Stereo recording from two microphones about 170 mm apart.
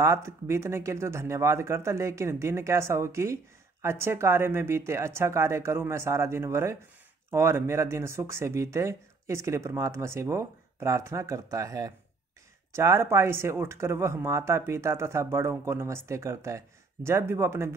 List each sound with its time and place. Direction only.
0.0 s speech: 15° right (ahead or behind)